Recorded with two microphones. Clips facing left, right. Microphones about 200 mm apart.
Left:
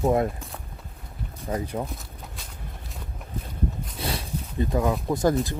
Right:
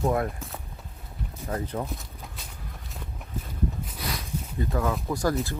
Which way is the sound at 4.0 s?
30° left (ahead or behind).